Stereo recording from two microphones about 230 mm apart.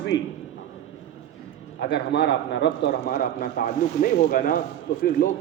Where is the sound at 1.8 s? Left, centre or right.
Left.